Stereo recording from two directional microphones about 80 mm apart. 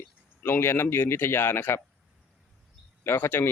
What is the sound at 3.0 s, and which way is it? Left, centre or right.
Speech, left.